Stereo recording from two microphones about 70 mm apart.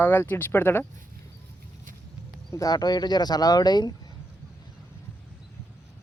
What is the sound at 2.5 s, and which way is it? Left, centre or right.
Speech, left.